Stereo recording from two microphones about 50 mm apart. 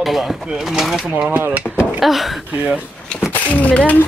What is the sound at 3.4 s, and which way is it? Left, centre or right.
Speech, left.